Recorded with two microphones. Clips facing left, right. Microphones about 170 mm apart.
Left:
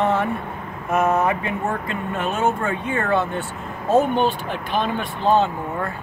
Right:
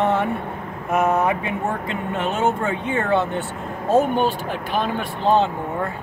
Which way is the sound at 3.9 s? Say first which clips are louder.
Even; 10° right (ahead or behind).